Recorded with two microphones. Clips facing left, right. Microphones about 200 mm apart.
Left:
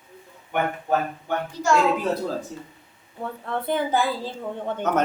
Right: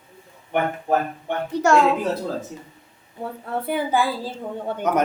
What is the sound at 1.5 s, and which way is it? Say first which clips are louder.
Speech: right 5 dB; 65° right (ahead or behind).